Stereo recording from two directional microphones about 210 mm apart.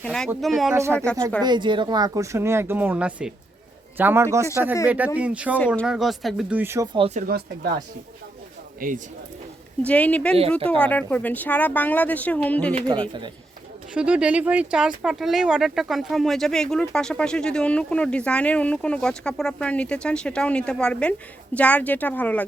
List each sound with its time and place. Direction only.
0.0 s speech: 5° left (ahead or behind)
1.4 s speech: 20° right (ahead or behind)
5.5 s speech: 5° left (ahead or behind); by 6.8 s 10° right (ahead or behind)
6.9 s speech: 30° right (ahead or behind); by 7.7 s 45° right (ahead or behind)
8.8 s speech: 40° right (ahead or behind)
9.8 s speech: 5° left (ahead or behind)
12.7 s speech: 25° right (ahead or behind)
13.9 s speech: 5° right (ahead or behind)